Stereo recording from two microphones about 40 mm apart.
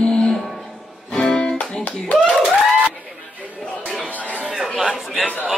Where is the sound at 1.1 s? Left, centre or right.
Centre.